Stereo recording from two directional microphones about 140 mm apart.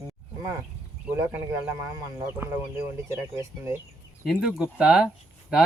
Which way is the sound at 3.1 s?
20° right (ahead or behind).